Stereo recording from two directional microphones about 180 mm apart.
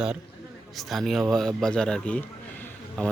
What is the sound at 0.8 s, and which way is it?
A man's voice, centre (ahead or behind).